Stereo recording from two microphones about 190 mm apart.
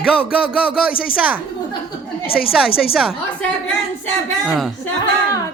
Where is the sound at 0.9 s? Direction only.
50° left (ahead or behind).